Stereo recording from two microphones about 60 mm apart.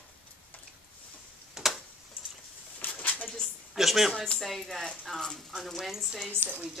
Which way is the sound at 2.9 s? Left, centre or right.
Left.